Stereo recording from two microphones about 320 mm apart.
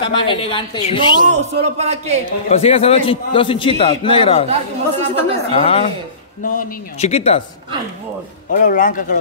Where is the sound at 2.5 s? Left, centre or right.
Centre.